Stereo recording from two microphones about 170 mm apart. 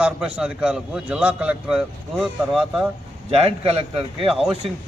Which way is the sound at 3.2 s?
35° right (ahead or behind).